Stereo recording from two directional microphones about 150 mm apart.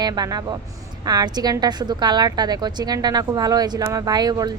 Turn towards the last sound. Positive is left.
turn(degrees=-25)  # may be behind; listen again after turning